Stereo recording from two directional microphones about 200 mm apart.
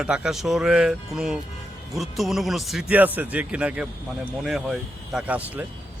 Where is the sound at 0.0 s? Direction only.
5° right (ahead or behind).